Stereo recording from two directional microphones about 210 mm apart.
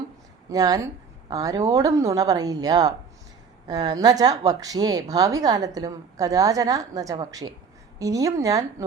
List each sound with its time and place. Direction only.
0.5 s speech: 15° right (ahead or behind)